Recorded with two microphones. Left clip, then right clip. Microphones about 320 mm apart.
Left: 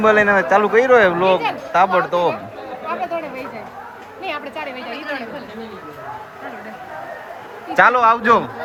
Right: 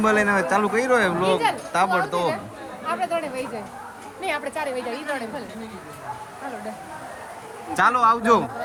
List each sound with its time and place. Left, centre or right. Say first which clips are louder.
0.0 s speech: left 6 dB; centre
2.8 s chatter: left 1 dB; right
4.2 s a sound: even; right
7.7 s speech: left 5 dB; centre